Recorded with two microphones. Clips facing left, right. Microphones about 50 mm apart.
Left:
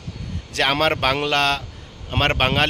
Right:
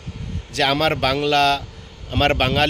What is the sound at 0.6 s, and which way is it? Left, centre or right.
A man's voice, left.